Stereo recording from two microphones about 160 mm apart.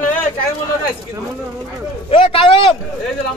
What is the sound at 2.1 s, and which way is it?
Speech, 35° left (ahead or behind).